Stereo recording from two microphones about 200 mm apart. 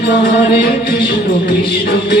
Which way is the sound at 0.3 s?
55° left (ahead or behind).